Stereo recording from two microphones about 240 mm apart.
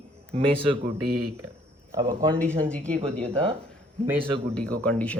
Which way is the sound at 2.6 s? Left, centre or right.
Centre.